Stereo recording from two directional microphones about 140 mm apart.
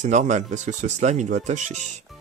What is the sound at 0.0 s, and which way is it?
Speech, 60° right (ahead or behind).